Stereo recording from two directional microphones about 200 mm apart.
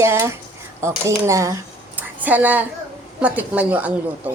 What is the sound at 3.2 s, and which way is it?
Speech, 5° right (ahead or behind).